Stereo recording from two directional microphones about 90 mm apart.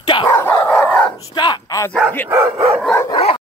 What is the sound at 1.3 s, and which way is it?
Speech, 55° left (ahead or behind).